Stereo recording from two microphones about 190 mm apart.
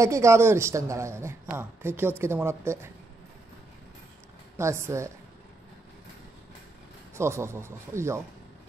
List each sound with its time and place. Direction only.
0.0 s a man's voice: 15° right (ahead or behind)
4.6 s a man's voice: 15° right (ahead or behind)
7.2 s a man's voice: 15° right (ahead or behind)